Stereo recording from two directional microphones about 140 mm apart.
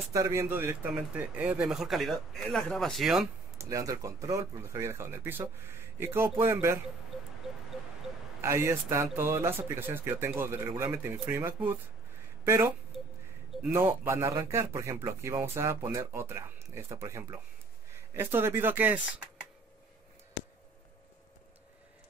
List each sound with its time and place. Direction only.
0.1 s speech: 20° right (ahead or behind); by 3.3 s centre (ahead or behind)
3.5 s speech: 20° right (ahead or behind)
7.4 s a sound: 5° right (ahead or behind)
8.4 s speech: 20° right (ahead or behind)
12.9 s a sound: centre (ahead or behind)
13.6 s speech: 15° right (ahead or behind)